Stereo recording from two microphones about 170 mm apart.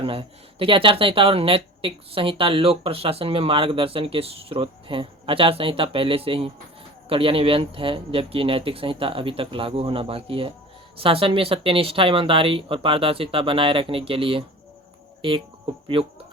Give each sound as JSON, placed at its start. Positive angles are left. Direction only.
{"t": 0.0, "sound": "speech", "side_deg": -30}
{"t": 15.9, "sound": "speech", "side_deg": -30}